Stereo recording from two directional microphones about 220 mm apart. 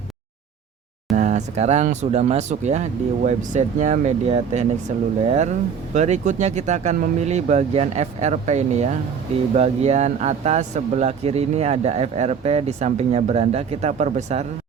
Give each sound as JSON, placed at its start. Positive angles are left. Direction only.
{"t": 1.1, "sound": "speech", "side_deg": -35}